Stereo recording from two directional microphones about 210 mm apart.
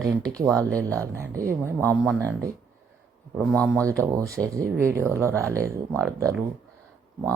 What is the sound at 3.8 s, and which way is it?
Speech, 15° right (ahead or behind).